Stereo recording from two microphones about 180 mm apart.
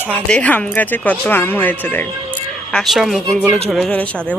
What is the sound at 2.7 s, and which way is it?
Speech, centre (ahead or behind).